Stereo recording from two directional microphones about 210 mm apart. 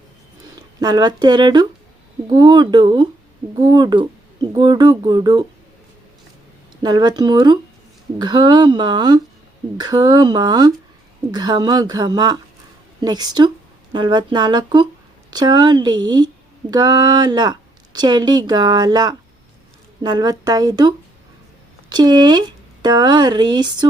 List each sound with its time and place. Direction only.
0.8 s a woman's voice: 20° right (ahead or behind)
6.8 s a woman's voice: 20° right (ahead or behind)